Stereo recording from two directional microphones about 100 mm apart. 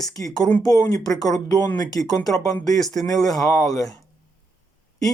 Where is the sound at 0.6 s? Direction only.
35° left (ahead or behind).